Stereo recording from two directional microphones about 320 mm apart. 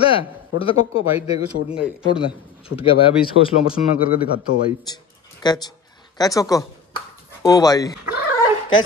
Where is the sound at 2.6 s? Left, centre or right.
Centre.